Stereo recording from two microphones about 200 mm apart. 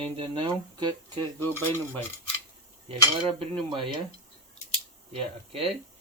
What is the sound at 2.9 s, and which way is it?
Speech, 25° right (ahead or behind).